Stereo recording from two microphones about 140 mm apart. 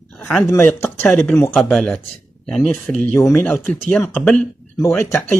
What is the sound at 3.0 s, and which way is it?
A man's voice, 15° left (ahead or behind).